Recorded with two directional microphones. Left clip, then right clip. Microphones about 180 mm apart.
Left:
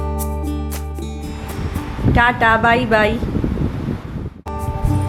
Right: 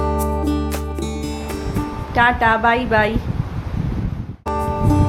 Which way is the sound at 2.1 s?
5° left (ahead or behind).